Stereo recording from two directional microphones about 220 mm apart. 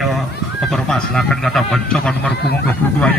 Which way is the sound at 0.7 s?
Centre (ahead or behind).